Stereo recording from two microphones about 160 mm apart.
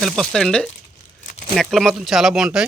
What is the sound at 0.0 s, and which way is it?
Speech, centre (ahead or behind).